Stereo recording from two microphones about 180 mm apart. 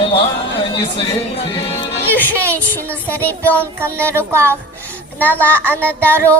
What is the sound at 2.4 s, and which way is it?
Child singing, 15° right (ahead or behind).